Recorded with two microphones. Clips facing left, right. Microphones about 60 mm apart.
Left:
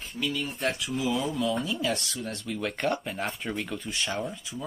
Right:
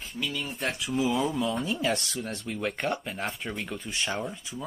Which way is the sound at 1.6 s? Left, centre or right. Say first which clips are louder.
Right 1 dB; right.